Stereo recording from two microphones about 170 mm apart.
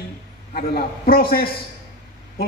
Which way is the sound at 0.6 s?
60° left (ahead or behind).